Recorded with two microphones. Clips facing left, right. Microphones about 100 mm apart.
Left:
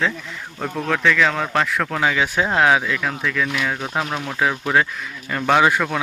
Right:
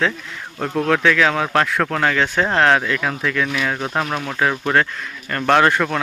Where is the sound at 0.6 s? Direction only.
Centre (ahead or behind).